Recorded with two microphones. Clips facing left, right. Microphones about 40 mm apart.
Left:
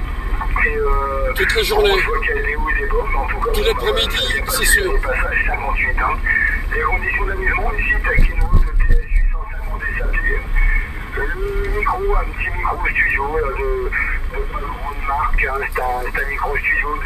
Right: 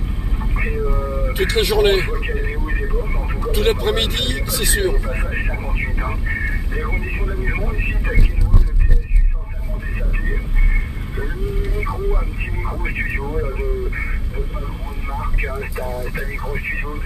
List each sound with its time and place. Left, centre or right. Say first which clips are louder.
0.4 s vehicle: left 7 dB; left
1.6 s speech: right 1 dB; centre
2.0 s speech: left 5 dB; left
3.5 s speech: right 1 dB; centre
4.7 s speech: left 3 dB; left
9.9 s a sound: left 7 dB; left
15.0 s speech: left 8 dB; left